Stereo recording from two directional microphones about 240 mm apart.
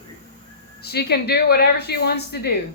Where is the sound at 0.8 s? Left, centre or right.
Left.